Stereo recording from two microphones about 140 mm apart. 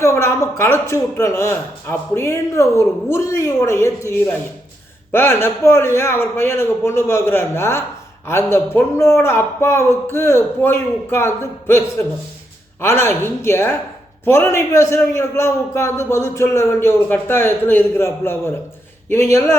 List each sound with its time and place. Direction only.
0.0 s speech: 20° left (ahead or behind)